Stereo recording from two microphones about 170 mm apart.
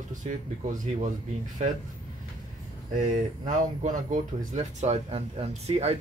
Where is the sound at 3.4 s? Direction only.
45° right (ahead or behind).